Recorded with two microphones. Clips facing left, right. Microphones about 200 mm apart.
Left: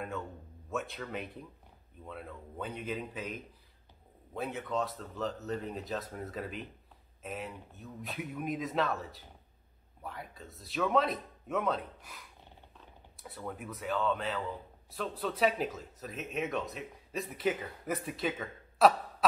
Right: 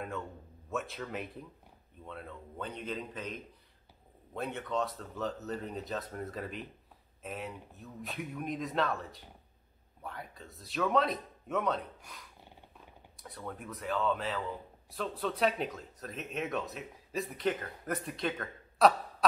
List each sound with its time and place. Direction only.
0.7 s speech: centre (ahead or behind)
13.2 s speech: 5° left (ahead or behind)